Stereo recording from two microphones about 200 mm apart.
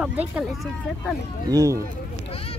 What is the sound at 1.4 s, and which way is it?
Speech, 15° right (ahead or behind).